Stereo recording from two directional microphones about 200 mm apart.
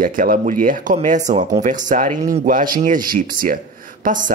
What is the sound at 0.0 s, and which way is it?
Speech, 45° right (ahead or behind).